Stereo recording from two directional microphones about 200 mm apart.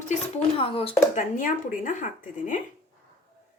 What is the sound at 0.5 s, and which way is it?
Speech, 25° left (ahead or behind).